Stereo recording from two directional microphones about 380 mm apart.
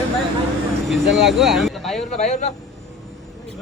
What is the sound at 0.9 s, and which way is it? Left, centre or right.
Speech, centre.